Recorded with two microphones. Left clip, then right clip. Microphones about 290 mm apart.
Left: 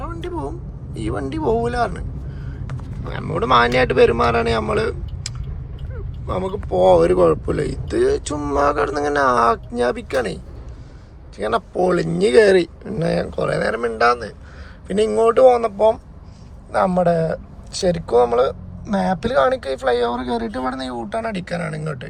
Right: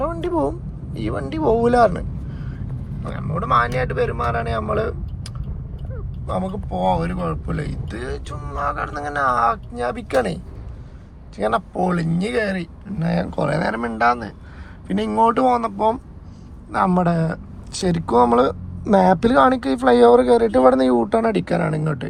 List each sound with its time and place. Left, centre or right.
0.0 s vehicle: centre
0.9 s speech: centre